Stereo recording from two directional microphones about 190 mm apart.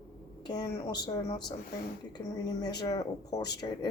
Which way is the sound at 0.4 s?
20° left (ahead or behind).